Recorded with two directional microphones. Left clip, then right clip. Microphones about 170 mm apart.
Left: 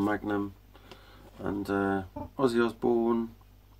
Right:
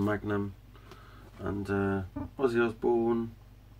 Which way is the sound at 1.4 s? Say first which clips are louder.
Left 2 dB; 30° left (ahead or behind).